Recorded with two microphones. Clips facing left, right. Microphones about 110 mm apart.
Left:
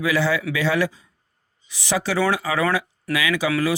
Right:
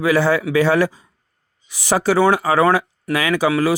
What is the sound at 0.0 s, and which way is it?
Speech, 45° right (ahead or behind).